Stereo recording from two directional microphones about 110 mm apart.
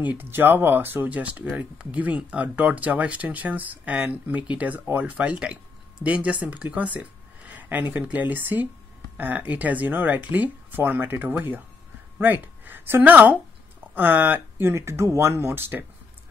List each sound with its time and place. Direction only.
0.2 s speech: 20° right (ahead or behind)